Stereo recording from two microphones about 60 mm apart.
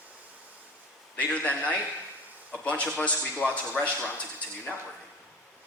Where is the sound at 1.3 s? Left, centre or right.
Left.